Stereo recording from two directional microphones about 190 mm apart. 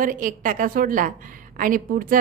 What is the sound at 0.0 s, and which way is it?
A woman's voice, 45° right (ahead or behind).